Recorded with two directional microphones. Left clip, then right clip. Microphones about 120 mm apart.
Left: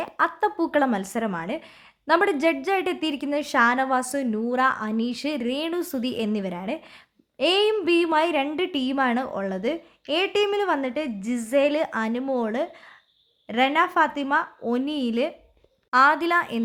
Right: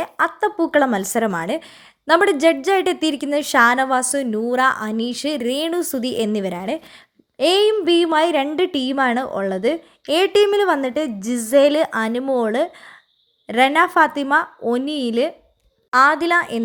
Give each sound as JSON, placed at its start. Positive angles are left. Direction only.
{"t": 0.2, "sound": "a woman's voice", "side_deg": -15}